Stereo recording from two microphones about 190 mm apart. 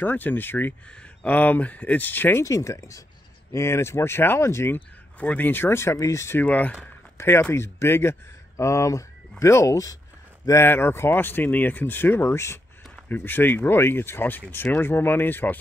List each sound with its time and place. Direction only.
0.0 s speech: 10° left (ahead or behind)